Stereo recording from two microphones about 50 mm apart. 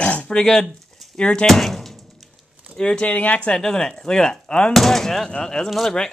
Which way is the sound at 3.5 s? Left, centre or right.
Centre.